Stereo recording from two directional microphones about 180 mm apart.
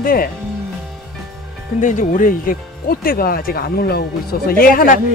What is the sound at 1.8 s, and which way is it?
Speech, 45° left (ahead or behind).